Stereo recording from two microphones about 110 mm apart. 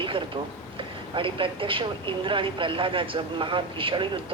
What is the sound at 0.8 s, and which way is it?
Speech, 50° right (ahead or behind).